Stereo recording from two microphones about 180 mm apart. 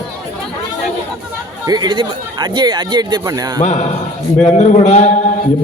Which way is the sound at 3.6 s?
40° left (ahead or behind).